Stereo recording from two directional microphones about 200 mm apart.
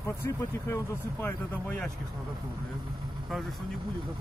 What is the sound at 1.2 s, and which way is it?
Speech, 10° left (ahead or behind).